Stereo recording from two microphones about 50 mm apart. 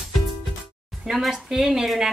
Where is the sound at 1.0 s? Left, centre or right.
Centre.